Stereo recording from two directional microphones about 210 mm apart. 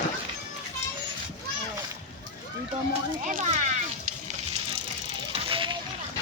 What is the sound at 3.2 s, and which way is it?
Music, 35° right (ahead or behind).